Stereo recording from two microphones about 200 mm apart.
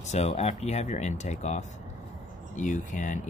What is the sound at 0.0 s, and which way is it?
Speech, 35° left (ahead or behind).